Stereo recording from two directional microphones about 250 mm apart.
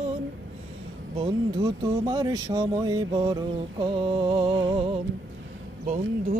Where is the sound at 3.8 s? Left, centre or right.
Centre.